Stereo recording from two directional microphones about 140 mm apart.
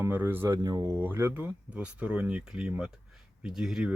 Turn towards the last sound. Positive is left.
turn(degrees=-5)  # may be behind; listen again after turning